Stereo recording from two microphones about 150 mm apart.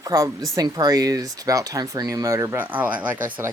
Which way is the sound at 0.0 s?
20° right (ahead or behind).